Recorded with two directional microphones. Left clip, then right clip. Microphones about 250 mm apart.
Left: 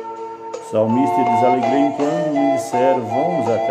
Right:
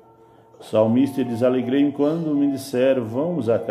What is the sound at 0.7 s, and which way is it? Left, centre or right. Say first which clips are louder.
Speech: left 2 dB; centre.